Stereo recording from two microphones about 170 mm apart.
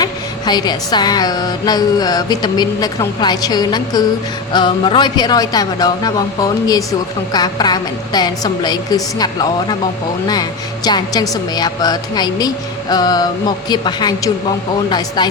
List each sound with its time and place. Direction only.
0.0 s speech: 25° left (ahead or behind)
10.8 s speech: 20° left (ahead or behind)